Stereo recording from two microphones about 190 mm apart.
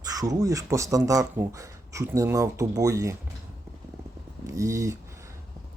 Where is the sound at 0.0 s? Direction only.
20° right (ahead or behind).